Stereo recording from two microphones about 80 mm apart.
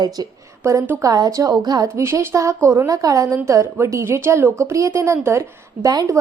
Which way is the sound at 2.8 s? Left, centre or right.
Right.